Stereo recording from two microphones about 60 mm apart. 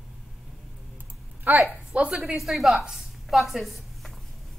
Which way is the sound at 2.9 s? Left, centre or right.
Centre.